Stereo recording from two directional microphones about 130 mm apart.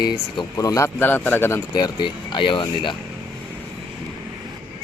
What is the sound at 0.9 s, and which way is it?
Speech, 15° left (ahead or behind).